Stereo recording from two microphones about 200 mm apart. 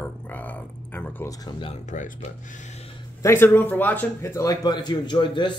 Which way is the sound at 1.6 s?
35° left (ahead or behind).